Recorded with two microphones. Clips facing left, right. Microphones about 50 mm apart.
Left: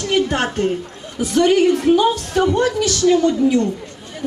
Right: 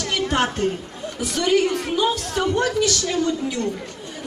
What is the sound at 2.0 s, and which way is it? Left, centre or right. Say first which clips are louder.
Speech: left 5 dB; left.